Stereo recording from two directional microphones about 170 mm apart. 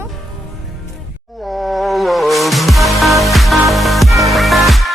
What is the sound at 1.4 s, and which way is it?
Music, centre (ahead or behind).